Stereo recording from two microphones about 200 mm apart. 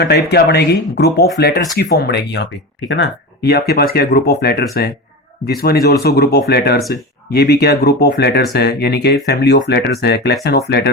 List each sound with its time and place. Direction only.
0.0 s speech: 55° left (ahead or behind)